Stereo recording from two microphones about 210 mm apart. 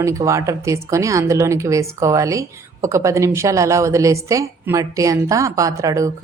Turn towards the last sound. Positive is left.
turn(degrees=-15)  # may be behind; listen again after turning